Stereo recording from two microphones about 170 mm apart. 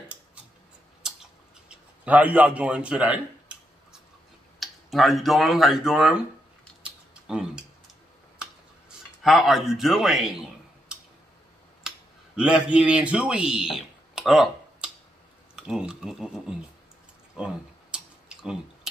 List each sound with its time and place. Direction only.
1.0 s a sound: centre (ahead or behind)
1.7 s speech: 10° right (ahead or behind)
4.6 s speech: centre (ahead or behind)
6.8 s a sound: 5° right (ahead or behind)
9.2 s a man's voice: centre (ahead or behind)
12.4 s a man's voice: 5° right (ahead or behind)
13.7 s a sound: centre (ahead or behind)
15.5 s a man's voice: 5° right (ahead or behind)
17.9 s tick-tock: 5° right (ahead or behind)